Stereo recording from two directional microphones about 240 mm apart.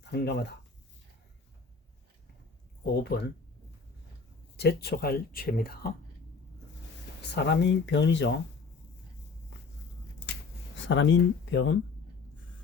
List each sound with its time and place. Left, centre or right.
0.1 s speech: left
2.8 s speech: left
4.5 s speech: left
7.2 s speech: left
10.8 s speech: left